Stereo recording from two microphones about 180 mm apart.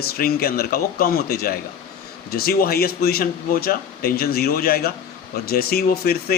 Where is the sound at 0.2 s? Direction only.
55° left (ahead or behind).